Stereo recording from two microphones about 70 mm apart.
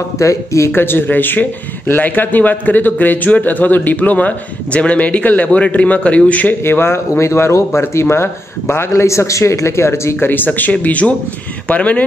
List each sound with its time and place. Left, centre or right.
0.2 s speech: left; by 6.5 s centre
6.6 s speech: left; by 12.0 s centre